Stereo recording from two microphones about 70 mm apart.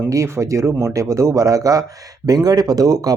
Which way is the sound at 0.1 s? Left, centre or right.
Right.